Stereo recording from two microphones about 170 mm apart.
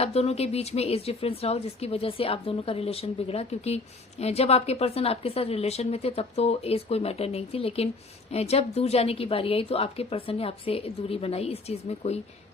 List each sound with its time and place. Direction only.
0.0 s a woman's voice: 35° left (ahead or behind)